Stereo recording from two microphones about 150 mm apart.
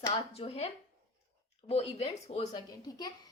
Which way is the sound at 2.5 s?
25° left (ahead or behind).